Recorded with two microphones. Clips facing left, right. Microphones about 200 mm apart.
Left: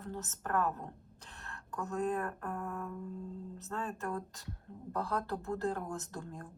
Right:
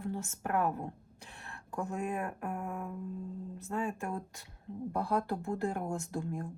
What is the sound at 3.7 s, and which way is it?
Speech, 10° right (ahead or behind).